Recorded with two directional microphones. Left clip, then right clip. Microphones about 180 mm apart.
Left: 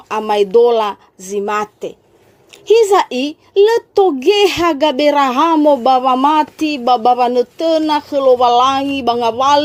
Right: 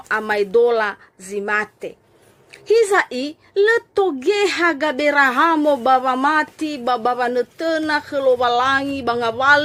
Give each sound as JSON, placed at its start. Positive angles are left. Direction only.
{"t": 0.1, "sound": "speech", "side_deg": 35}
{"t": 2.5, "sound": "a sound", "side_deg": -5}
{"t": 3.1, "sound": "a woman's voice", "side_deg": -10}
{"t": 3.8, "sound": "a woman's voice", "side_deg": 25}